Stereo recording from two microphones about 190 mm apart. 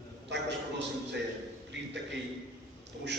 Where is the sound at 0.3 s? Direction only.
65° right (ahead or behind).